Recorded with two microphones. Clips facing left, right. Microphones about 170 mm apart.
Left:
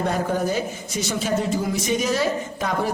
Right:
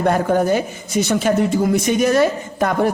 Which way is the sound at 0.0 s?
60° right (ahead or behind).